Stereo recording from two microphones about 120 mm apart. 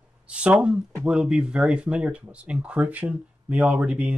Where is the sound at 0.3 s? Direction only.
10° right (ahead or behind).